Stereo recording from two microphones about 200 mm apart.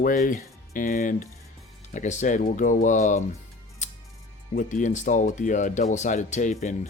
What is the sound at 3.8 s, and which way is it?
Music, 40° left (ahead or behind).